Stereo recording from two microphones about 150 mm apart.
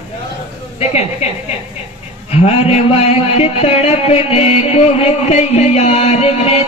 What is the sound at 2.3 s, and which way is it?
A man's voice, 45° left (ahead or behind).